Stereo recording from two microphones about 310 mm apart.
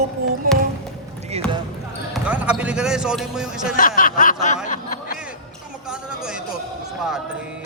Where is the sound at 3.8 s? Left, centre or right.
Left.